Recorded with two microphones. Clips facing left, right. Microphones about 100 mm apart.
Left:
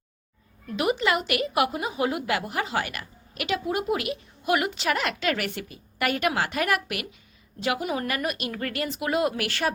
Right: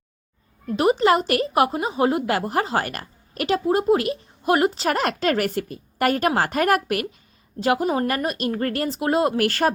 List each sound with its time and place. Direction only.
0.7 s a woman's voice: 35° right (ahead or behind)